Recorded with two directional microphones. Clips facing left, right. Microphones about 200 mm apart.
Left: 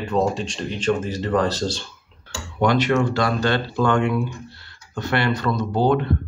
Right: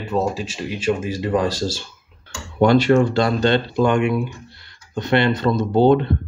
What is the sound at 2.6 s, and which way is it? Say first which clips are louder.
Speech: right 5 dB; 30° right (ahead or behind).